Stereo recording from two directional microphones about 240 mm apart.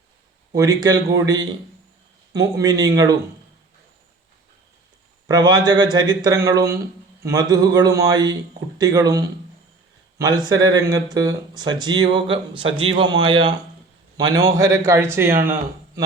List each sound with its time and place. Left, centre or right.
0.5 s speech: centre
5.3 s a man's voice: centre